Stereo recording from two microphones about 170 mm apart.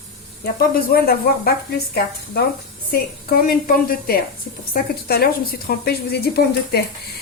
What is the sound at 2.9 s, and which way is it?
A woman's voice, 60° left (ahead or behind).